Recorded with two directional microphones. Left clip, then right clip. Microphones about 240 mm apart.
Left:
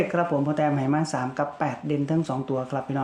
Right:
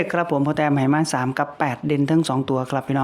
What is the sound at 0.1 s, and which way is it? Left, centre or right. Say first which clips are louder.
Speech: right 3 dB; right.